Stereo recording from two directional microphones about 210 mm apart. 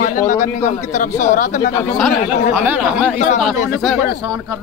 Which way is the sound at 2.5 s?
5° right (ahead or behind).